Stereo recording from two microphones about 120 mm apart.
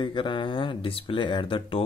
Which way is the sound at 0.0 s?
45° left (ahead or behind).